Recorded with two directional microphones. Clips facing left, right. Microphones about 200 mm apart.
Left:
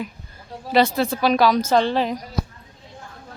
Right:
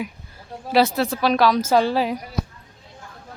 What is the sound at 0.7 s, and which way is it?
A woman's voice, centre (ahead or behind).